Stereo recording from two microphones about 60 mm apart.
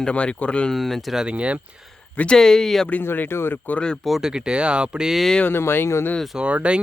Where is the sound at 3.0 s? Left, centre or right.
Left.